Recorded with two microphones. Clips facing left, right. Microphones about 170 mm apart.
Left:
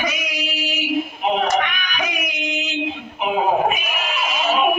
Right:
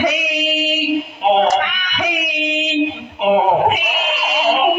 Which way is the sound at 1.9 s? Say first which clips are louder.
Right 8 dB; 75° right (ahead or behind).